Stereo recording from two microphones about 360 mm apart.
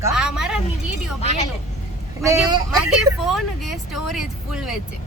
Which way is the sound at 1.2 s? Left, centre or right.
Centre.